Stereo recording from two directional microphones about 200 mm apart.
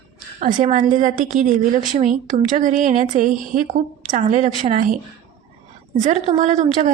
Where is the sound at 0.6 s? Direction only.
40° right (ahead or behind).